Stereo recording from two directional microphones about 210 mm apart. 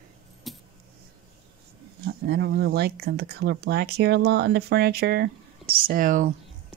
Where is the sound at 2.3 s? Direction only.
50° right (ahead or behind).